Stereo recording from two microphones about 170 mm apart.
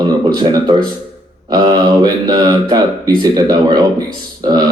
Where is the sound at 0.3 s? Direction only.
25° right (ahead or behind).